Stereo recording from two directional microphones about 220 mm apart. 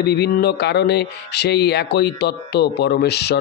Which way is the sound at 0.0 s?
50° left (ahead or behind).